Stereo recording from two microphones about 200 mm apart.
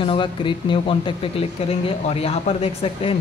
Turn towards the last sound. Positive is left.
turn(degrees=30)  # may be behind; listen again after turning